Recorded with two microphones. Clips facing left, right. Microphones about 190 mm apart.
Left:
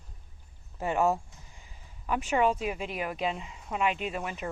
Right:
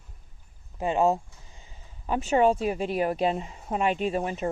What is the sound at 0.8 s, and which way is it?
Speech, 20° right (ahead or behind).